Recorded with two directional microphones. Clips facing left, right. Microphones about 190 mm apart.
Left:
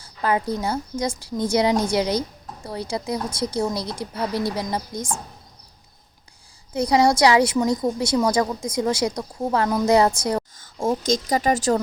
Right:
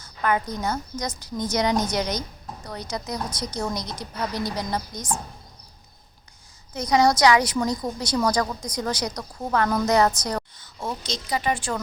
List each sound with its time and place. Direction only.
0.0 s a woman's voice: 30° left (ahead or behind)
6.7 s a woman's voice: 30° left (ahead or behind)
10.6 s speech: 45° left (ahead or behind)